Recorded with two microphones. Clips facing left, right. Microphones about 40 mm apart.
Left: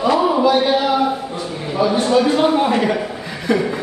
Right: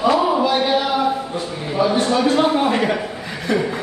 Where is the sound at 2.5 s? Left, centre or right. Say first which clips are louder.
Left 2 dB; centre.